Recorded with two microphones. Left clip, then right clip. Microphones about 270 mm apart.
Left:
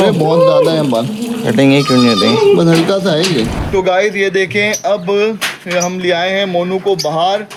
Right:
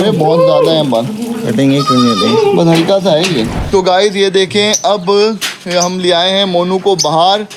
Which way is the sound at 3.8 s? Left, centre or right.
Right.